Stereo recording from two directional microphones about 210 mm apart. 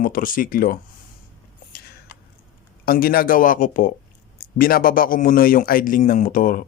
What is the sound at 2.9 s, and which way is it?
Speech, 45° left (ahead or behind).